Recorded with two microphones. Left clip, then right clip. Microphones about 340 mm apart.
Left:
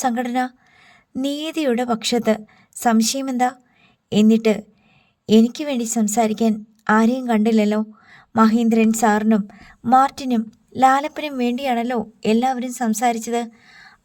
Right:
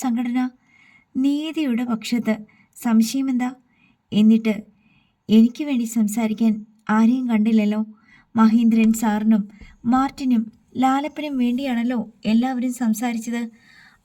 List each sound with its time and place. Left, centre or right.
0.0 s a woman's voice: left